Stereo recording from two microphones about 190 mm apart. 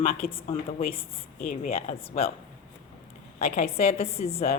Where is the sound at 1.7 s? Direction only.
35° left (ahead or behind).